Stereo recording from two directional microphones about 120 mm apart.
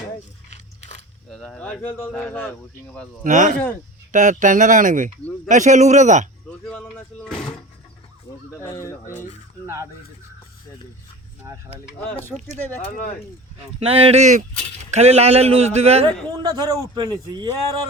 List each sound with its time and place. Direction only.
0.5 s biting: 75° left (ahead or behind)
1.3 s a sound: 5° left (ahead or behind)
1.6 s speech: 10° left (ahead or behind)
3.2 s speech: 90° right
6.5 s a sound: 5° left (ahead or behind)
8.5 s speech: 25° left (ahead or behind)
12.5 s speech: 20° left (ahead or behind)
13.7 s a man's voice: 55° right (ahead or behind); by 14.4 s 80° right
14.8 s a man's voice: 65° right (ahead or behind)
16.3 s a man's voice: 35° right (ahead or behind)